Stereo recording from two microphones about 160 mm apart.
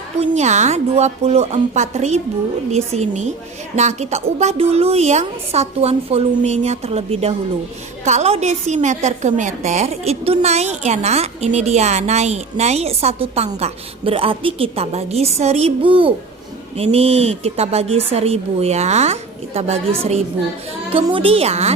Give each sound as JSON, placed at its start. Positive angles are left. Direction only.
{"t": 0.2, "sound": "a woman's voice", "side_deg": -45}
{"t": 20.9, "sound": "a woman's voice", "side_deg": -35}